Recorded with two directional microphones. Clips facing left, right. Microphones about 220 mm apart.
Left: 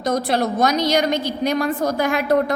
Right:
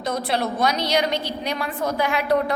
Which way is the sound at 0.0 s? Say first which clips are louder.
Left 4 dB; 45° left (ahead or behind).